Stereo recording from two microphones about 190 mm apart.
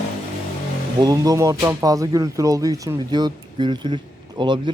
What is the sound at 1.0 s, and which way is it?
Speech, 20° right (ahead or behind).